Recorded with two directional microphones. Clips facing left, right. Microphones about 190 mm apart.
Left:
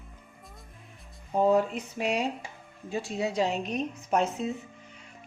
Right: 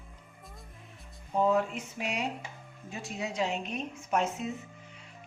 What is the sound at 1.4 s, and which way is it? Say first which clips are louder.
A woman's voice: left 3 dB; 35° left (ahead or behind).